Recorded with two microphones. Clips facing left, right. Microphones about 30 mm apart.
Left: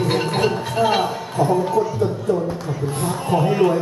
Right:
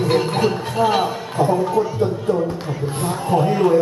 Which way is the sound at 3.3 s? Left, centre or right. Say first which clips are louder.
Even; centre.